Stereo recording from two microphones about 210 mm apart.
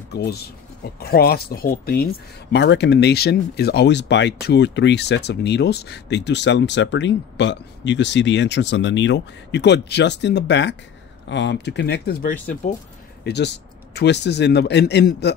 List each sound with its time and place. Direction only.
0.1 s a man's voice: 50° left (ahead or behind)